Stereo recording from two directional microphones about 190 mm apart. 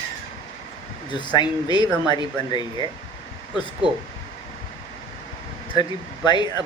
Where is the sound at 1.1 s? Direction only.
25° left (ahead or behind).